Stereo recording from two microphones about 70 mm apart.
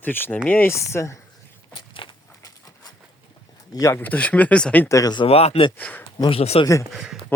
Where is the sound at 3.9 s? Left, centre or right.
Left.